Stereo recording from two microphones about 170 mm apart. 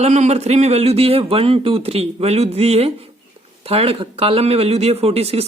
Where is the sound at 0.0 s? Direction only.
40° right (ahead or behind).